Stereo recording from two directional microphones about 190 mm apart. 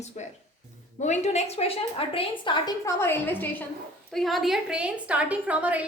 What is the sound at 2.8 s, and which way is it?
A woman's voice, 10° left (ahead or behind).